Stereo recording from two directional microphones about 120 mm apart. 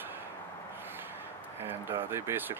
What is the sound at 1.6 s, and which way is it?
Speech, 20° right (ahead or behind).